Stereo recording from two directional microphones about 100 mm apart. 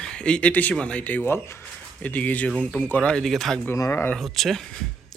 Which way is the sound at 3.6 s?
25° left (ahead or behind).